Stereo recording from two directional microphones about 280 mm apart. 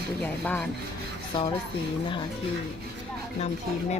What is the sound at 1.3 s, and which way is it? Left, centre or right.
Speech, centre.